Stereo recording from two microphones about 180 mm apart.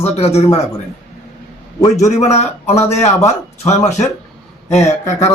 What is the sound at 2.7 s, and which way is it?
Speech, 35° left (ahead or behind).